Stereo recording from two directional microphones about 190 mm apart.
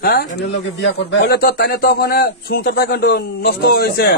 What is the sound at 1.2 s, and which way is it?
A man's voice, 50° left (ahead or behind).